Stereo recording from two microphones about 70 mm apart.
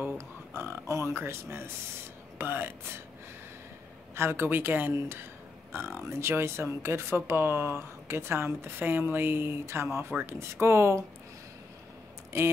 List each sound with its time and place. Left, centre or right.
0.5 s a sound: right
1.1 s speech: right
4.1 s speech: right
12.3 s speech: right